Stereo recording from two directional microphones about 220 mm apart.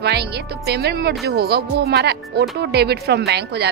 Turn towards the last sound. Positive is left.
turn(degrees=-50)  # may be behind; listen again after turning